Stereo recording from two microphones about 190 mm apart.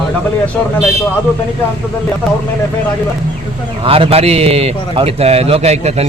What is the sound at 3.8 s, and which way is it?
A man's voice, 30° right (ahead or behind).